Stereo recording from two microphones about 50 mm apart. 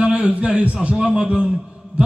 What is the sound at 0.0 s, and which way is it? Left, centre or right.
A man's voice, right.